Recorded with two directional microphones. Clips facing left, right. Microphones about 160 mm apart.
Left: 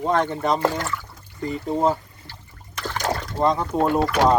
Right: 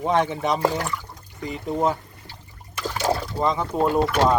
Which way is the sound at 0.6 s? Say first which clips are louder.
Even; 15° right (ahead or behind).